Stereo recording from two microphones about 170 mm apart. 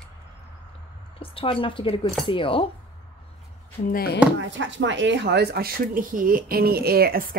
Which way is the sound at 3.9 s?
65° left (ahead or behind).